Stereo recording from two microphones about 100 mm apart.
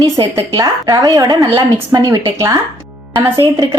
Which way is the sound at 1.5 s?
25° right (ahead or behind).